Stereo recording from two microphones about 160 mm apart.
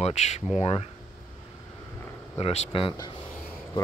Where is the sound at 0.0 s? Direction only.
45° left (ahead or behind).